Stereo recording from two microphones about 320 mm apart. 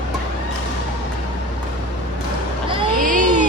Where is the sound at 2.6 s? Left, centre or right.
Right.